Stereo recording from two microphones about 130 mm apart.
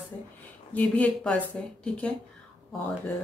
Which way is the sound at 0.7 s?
10° left (ahead or behind).